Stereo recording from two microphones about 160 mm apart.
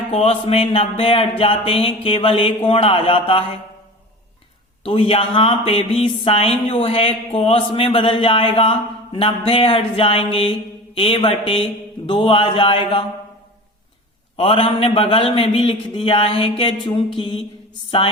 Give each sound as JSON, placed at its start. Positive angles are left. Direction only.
{"t": 0.1, "sound": "speech", "side_deg": 40}
{"t": 4.8, "sound": "speech", "side_deg": 35}
{"t": 14.3, "sound": "speech", "side_deg": 35}